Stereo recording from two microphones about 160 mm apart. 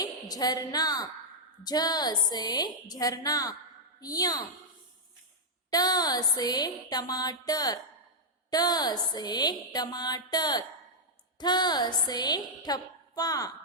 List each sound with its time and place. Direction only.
0.0 s a woman's voice: 25° left (ahead or behind)
5.7 s speech: 25° left (ahead or behind)